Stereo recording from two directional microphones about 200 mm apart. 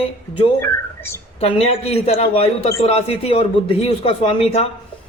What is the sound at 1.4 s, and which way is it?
A man's voice, 30° left (ahead or behind).